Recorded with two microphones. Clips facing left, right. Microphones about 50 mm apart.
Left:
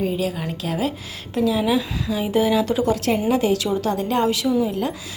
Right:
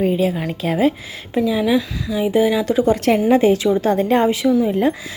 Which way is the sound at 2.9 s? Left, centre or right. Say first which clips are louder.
Right 5 dB; right.